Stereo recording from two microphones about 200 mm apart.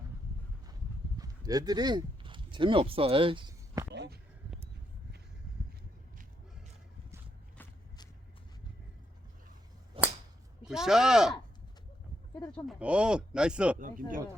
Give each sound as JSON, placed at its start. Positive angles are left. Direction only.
{"t": 1.2, "sound": "speech", "side_deg": -20}
{"t": 3.9, "sound": "a sound", "side_deg": -60}
{"t": 10.0, "sound": "whip", "side_deg": -25}
{"t": 10.6, "sound": "speech", "side_deg": 0}
{"t": 12.5, "sound": "speech", "side_deg": 0}
{"t": 13.7, "sound": "speech", "side_deg": -40}